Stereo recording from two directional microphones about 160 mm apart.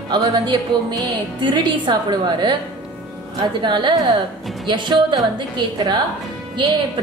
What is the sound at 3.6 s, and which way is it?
A woman's voice, 30° right (ahead or behind).